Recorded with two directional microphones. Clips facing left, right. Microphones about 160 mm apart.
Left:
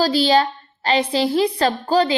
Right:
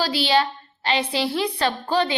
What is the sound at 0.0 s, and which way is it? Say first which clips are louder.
A woman's voice: left 5 dB; 40° left (ahead or behind).